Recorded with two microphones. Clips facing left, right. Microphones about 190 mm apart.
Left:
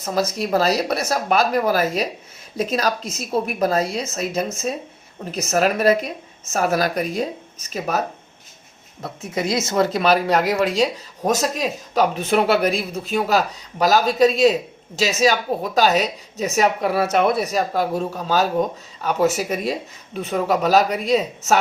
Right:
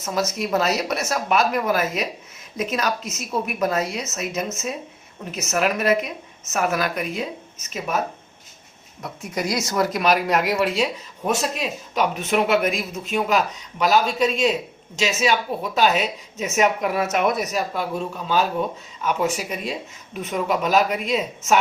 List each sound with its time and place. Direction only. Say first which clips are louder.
0.0 s a woman's voice: left 2 dB; 35° left (ahead or behind)